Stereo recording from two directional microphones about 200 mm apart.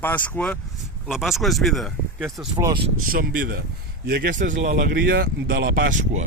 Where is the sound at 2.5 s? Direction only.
25° right (ahead or behind).